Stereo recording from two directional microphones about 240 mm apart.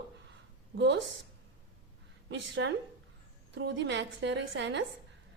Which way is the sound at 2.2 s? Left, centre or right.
Right.